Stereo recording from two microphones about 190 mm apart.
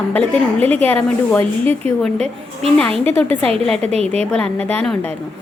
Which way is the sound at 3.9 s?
35° right (ahead or behind).